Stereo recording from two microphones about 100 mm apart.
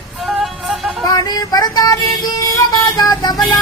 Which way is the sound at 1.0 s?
40° left (ahead or behind).